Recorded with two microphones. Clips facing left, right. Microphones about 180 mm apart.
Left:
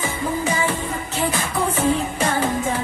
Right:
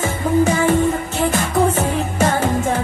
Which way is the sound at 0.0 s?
50° right (ahead or behind).